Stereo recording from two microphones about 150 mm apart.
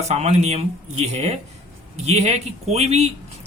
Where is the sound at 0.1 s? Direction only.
45° right (ahead or behind).